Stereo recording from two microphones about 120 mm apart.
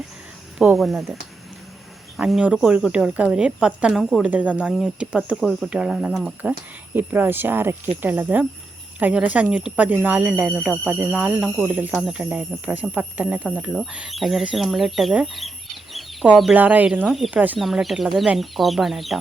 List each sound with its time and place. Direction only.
0.8 s speech: centre (ahead or behind)
2.1 s speech: 5° right (ahead or behind)
6.9 s speech: 15° right (ahead or behind); by 16.0 s centre (ahead or behind)
16.6 s speech: 15° right (ahead or behind)
17.6 s speech: centre (ahead or behind)